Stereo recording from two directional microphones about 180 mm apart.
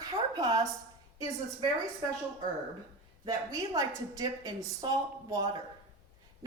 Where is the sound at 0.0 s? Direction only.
20° right (ahead or behind).